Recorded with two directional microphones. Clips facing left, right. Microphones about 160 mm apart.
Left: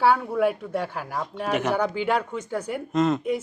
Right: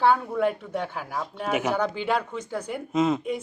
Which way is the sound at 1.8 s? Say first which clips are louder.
Left 2 dB; 5° left (ahead or behind).